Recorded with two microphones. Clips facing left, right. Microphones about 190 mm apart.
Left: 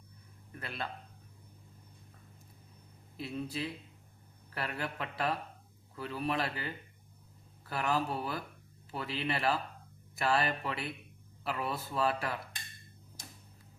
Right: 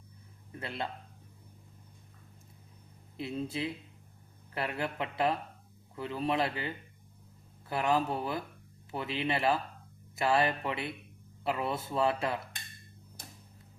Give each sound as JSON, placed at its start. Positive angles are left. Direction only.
{"t": 0.5, "sound": "speech", "side_deg": -20}
{"t": 3.2, "sound": "speech", "side_deg": -25}